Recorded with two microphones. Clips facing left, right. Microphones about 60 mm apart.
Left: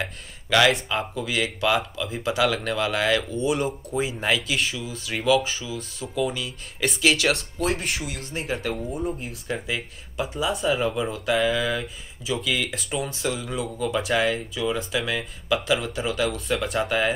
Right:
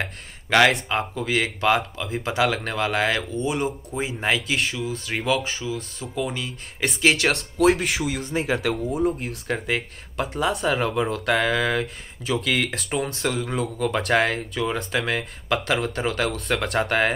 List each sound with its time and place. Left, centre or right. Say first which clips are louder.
0.0 s speech: right 1 dB; right
4.6 s speech: right 2 dB; right
7.2 s speech: right 1 dB; right
7.5 s speech: right 7 dB; right
9.0 s speech: right 5 dB; right
9.7 s speech: right 4 dB; right